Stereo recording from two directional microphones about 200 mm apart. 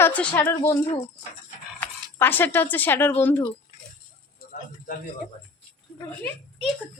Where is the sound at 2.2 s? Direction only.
10° left (ahead or behind).